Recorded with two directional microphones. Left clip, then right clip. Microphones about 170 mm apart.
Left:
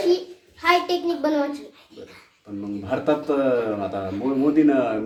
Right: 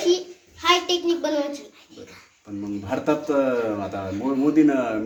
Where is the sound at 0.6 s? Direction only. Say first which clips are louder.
Even; 10° left (ahead or behind).